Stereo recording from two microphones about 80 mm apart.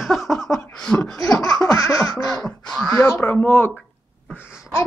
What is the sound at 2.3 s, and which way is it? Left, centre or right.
Speech, centre.